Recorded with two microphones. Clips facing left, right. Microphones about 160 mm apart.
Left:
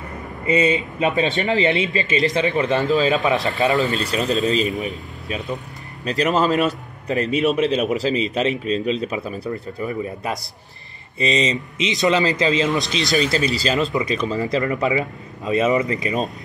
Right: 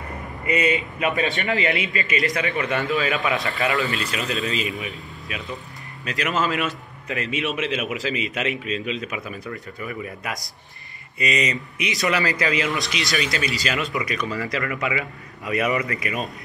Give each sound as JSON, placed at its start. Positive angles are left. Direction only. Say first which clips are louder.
{"t": 0.5, "sound": "a man's voice", "louder": "left 4 dB", "side_deg": 25}
{"t": 3.6, "sound": "a man's voice", "louder": "left 5 dB", "side_deg": 40}